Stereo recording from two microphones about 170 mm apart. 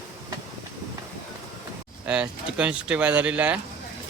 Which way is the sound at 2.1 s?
5° right (ahead or behind).